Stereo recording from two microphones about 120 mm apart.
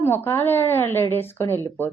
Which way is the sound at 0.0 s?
20° left (ahead or behind).